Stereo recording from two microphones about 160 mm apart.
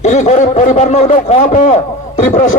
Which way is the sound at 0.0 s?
45° left (ahead or behind).